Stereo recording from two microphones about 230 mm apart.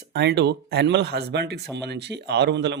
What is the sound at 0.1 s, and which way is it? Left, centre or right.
Speech, right.